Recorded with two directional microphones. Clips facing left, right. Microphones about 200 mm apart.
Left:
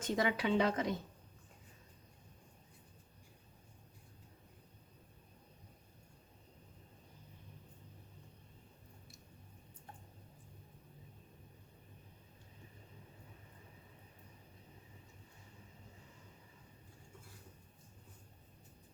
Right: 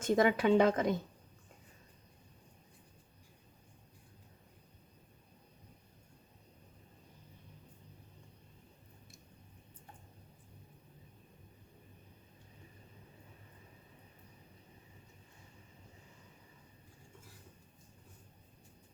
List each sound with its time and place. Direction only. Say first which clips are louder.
0.0 s a woman's voice: right 6 dB; 50° right (ahead or behind)